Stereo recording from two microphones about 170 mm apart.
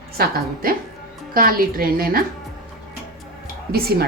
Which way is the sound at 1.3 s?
60° right (ahead or behind).